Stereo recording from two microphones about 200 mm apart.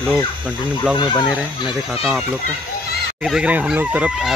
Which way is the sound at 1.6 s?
5° right (ahead or behind).